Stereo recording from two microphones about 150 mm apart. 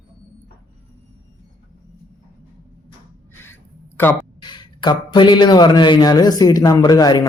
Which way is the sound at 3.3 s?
15° left (ahead or behind).